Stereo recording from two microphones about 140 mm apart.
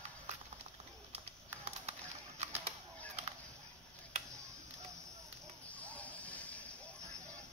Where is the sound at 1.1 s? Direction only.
50° right (ahead or behind).